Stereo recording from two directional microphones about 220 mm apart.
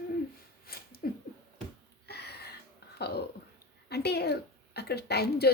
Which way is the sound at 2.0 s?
45° left (ahead or behind).